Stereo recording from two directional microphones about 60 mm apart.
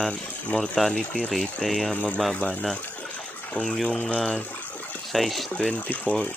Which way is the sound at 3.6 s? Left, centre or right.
Centre.